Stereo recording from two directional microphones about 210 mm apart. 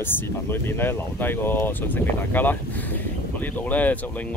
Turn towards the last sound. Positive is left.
turn(degrees=5)  # may be behind; listen again after turning